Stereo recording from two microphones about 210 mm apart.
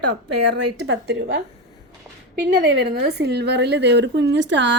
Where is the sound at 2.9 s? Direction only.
50° right (ahead or behind).